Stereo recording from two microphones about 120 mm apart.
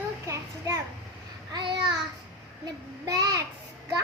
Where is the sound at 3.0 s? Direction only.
30° right (ahead or behind).